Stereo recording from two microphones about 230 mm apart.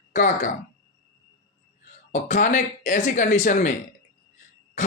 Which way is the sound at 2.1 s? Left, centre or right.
Left.